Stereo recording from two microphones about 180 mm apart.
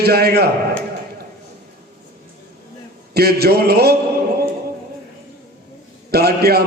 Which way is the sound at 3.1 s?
60° right (ahead or behind).